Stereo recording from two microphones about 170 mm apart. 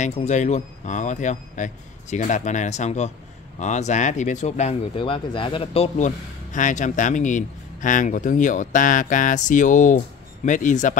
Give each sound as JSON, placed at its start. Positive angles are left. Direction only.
{"t": 0.0, "sound": "speech", "side_deg": 45}